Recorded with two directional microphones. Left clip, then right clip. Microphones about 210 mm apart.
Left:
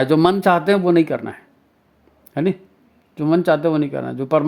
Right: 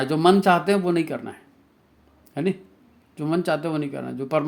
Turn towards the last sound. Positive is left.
turn(degrees=30)  # may be behind; listen again after turning